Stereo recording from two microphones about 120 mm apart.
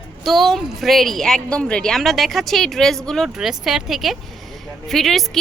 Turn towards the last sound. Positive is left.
turn(degrees=0)  # may be behind; listen again after turning